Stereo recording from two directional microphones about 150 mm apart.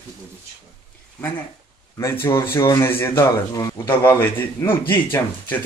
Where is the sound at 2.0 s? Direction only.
15° left (ahead or behind).